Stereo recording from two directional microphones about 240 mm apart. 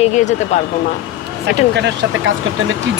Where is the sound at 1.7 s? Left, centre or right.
Right.